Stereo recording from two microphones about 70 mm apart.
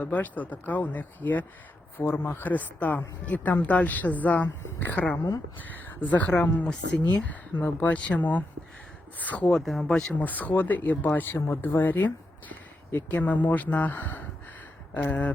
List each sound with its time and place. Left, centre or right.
0.0 s speech: left
7.9 s speech: centre
9.5 s speech: centre
10.2 s speech: left
11.8 s a sound: left
13.1 s speech: left